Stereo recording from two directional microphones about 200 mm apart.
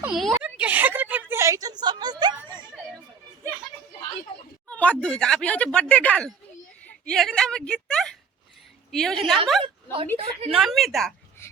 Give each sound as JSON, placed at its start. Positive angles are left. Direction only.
{"t": 0.0, "sound": "a woman's voice", "side_deg": 0}
{"t": 4.7, "sound": "a woman's voice", "side_deg": 5}
{"t": 9.6, "sound": "a woman's voice", "side_deg": -25}
{"t": 10.5, "sound": "speech", "side_deg": 0}